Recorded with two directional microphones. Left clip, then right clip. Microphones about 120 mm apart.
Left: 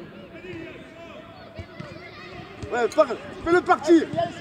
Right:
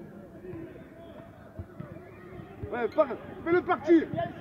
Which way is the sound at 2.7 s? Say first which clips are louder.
Left 6 dB; 50° left (ahead or behind).